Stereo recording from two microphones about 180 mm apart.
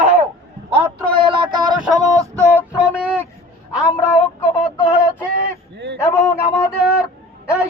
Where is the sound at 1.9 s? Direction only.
20° right (ahead or behind).